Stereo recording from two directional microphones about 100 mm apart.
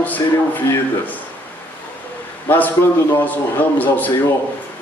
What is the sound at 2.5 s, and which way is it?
Speech, 15° left (ahead or behind).